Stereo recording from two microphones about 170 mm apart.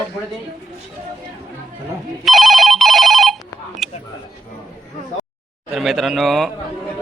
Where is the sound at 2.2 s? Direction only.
Centre (ahead or behind).